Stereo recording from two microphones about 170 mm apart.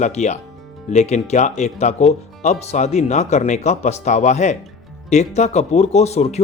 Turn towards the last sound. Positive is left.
turn(degrees=40)  # may be behind; listen again after turning